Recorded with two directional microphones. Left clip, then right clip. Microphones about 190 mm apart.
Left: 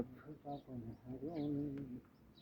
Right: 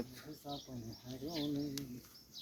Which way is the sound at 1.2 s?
60° right (ahead or behind).